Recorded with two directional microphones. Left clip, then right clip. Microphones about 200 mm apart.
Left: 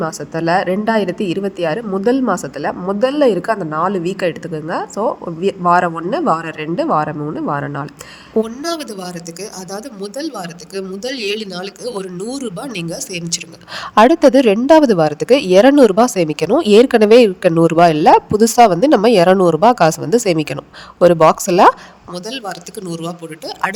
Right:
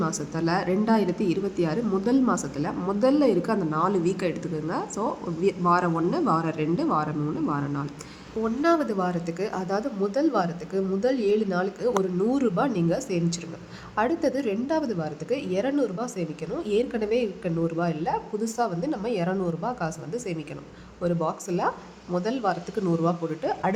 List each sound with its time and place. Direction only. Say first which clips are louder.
0.0 s a woman's voice: left 9 dB; 35° left (ahead or behind)
8.6 s speech: even; 55° left (ahead or behind)
9.4 s speech: right 1 dB; centre (ahead or behind)
10.8 s speech: left 2 dB; 55° left (ahead or behind)
12.4 s speech: right 1 dB; centre (ahead or behind)
13.0 s a woman's voice: left 5 dB; 55° left (ahead or behind)
22.4 s speech: even; centre (ahead or behind)
23.6 s a woman's voice: left 9 dB; 55° left (ahead or behind)